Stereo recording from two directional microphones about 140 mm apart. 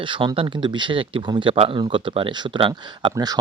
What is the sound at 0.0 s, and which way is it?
Speech, 35° right (ahead or behind).